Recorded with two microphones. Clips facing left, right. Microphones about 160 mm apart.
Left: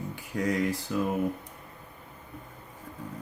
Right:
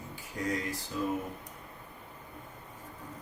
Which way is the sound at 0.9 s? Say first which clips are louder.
Left 3 dB; 65° left (ahead or behind).